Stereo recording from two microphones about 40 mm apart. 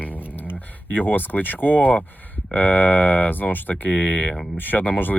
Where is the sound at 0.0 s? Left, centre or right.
Left.